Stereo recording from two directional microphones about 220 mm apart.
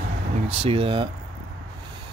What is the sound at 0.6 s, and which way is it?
Speech, 25° right (ahead or behind).